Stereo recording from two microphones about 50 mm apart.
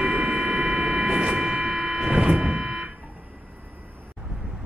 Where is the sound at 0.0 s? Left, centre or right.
Centre.